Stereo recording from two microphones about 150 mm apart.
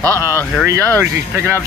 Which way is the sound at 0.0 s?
20° right (ahead or behind).